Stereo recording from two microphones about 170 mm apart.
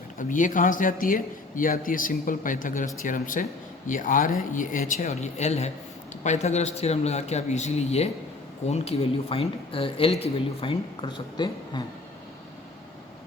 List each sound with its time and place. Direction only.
0.2 s speech: 50° left (ahead or behind); by 11.8 s 25° left (ahead or behind)